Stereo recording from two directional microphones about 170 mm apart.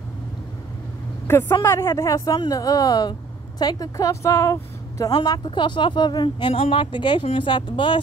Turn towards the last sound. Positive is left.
turn(degrees=25)  # may be behind; listen again after turning